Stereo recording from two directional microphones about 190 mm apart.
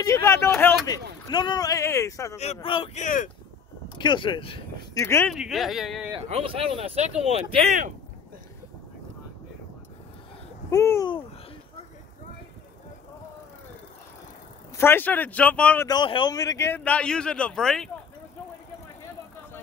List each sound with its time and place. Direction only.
0.0 s a man's voice: 15° left (ahead or behind)
2.3 s speech: 35° left (ahead or behind)
4.0 s speech: 25° left (ahead or behind)
4.9 s a man's voice: 15° left (ahead or behind)
5.3 s speech: centre (ahead or behind)
6.1 s speech: 30° right (ahead or behind)
10.7 s a man's voice: 15° left (ahead or behind)
14.8 s a man's voice: 10° left (ahead or behind)
15.9 s a man's voice: 25° left (ahead or behind); by 17.9 s 5° left (ahead or behind)